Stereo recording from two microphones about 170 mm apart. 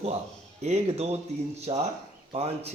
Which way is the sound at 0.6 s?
40° right (ahead or behind).